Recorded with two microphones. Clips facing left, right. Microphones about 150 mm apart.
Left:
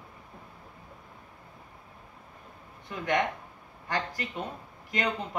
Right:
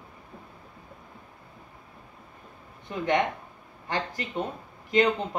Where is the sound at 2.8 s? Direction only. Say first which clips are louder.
Right 3 dB; 25° right (ahead or behind).